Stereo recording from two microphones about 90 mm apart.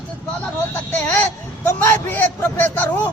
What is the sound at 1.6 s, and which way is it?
Speech, 20° left (ahead or behind).